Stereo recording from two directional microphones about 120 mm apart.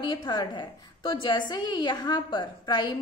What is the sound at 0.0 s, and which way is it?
A woman's voice, 35° left (ahead or behind).